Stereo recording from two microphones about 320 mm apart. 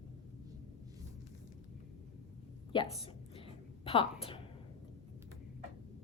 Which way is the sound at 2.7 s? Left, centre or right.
Centre.